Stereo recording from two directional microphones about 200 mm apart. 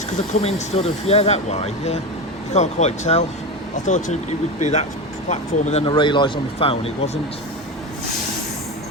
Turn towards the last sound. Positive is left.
turn(degrees=30)  # may be behind; listen again after turning